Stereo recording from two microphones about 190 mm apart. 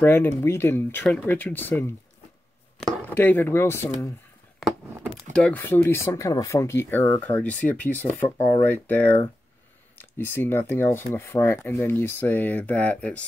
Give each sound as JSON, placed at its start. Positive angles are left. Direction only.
{"t": 0.0, "sound": "speech", "side_deg": 10}
{"t": 5.3, "sound": "speech", "side_deg": 5}